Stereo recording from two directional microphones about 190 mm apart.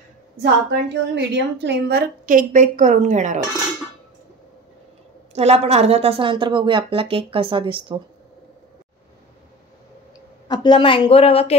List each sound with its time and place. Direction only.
0.4 s a woman's voice: 65° right (ahead or behind); by 3.3 s 40° right (ahead or behind)
5.3 s a woman's voice: 35° right (ahead or behind)
10.5 s speech: 25° left (ahead or behind)